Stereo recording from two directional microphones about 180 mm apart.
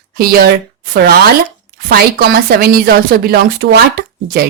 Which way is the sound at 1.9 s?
60° right (ahead or behind).